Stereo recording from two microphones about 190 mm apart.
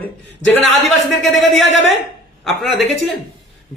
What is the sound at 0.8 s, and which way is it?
Speech, centre (ahead or behind).